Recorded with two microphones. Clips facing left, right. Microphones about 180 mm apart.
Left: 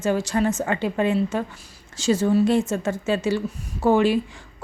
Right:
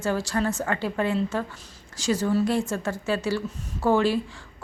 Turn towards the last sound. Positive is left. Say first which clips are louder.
# left 3 dB
turn(degrees=20)  # may be behind; listen again after turning